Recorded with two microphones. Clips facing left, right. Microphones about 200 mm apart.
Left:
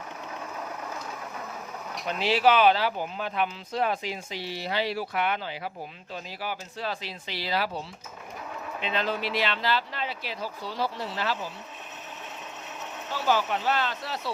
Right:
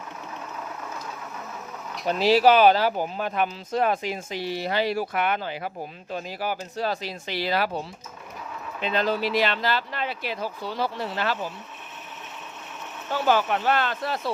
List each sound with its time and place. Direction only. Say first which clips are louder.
2.0 s speech: right 5 dB; 40° right (ahead or behind)
8.8 s speech: right 5 dB; 40° right (ahead or behind); by 11.3 s 60° right (ahead or behind)
13.1 s speech: right 4 dB; 55° right (ahead or behind)